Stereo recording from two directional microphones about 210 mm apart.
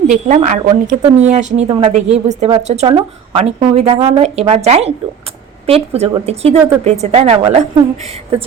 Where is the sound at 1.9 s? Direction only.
30° right (ahead or behind).